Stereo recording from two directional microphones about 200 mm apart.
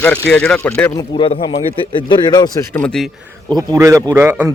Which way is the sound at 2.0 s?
20° left (ahead or behind).